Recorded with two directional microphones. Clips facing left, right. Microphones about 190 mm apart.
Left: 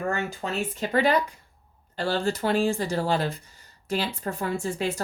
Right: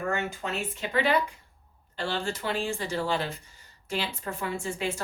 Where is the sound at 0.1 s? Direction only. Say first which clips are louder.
Left 2 dB; 35° left (ahead or behind).